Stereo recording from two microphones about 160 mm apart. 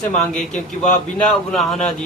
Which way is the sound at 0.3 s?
5° left (ahead or behind).